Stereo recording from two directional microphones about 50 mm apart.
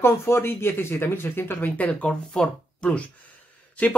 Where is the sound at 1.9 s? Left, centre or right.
Left.